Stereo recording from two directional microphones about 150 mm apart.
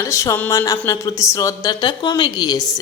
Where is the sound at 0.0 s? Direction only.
20° left (ahead or behind).